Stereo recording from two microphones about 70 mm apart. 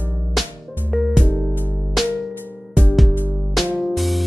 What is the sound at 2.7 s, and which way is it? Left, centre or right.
Music, left.